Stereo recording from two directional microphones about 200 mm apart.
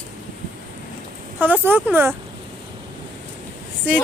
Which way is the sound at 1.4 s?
10° right (ahead or behind).